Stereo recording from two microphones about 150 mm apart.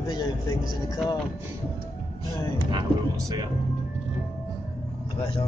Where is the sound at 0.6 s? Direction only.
Centre (ahead or behind).